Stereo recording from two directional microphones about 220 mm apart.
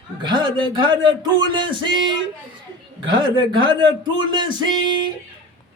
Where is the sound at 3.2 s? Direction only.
20° right (ahead or behind).